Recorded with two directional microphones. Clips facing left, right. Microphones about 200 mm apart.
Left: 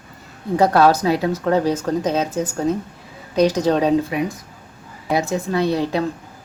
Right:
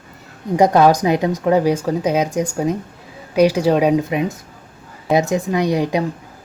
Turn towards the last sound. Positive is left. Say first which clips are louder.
# right 2 dB
turn(degrees=-15)  # may be behind; listen again after turning